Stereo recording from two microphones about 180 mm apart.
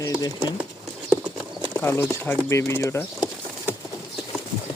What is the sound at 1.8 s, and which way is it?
Speech, 15° left (ahead or behind).